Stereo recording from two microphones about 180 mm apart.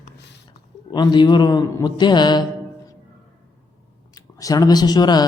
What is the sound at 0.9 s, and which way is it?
Speech, 25° left (ahead or behind).